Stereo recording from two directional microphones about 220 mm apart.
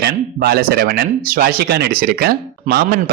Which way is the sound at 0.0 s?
45° right (ahead or behind).